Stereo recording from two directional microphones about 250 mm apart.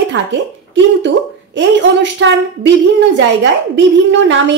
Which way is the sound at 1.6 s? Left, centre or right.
Right.